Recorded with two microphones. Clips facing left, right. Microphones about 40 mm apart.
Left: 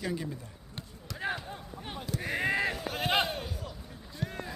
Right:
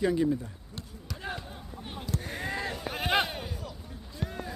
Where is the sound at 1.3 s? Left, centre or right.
Centre.